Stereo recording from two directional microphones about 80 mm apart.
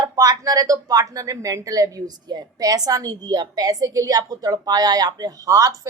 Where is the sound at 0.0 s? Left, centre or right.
Right.